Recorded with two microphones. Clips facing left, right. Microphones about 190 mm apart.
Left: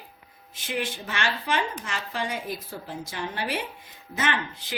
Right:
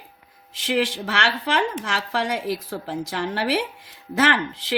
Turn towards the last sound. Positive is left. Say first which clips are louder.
# right 7 dB
turn(degrees=-90)